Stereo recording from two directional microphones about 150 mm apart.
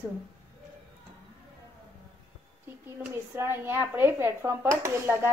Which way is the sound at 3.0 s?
15° right (ahead or behind).